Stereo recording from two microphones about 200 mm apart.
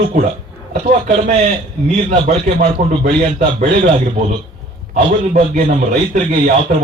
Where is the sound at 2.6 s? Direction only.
45° right (ahead or behind).